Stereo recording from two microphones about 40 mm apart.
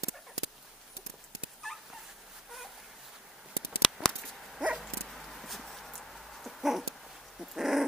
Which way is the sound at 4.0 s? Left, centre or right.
Centre.